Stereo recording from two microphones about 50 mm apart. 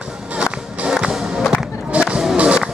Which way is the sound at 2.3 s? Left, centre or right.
Right.